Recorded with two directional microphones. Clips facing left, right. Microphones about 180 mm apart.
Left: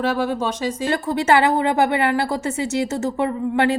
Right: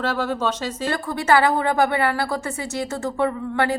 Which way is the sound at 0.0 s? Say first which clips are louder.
Left 2 dB; 10° left (ahead or behind).